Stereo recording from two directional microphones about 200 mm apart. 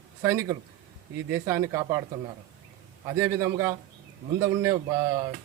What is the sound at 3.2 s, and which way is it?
A man's voice, 15° right (ahead or behind).